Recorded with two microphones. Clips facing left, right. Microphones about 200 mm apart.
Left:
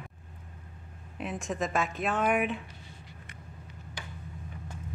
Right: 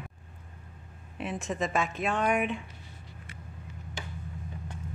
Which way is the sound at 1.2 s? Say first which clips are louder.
Right 1 dB; centre (ahead or behind).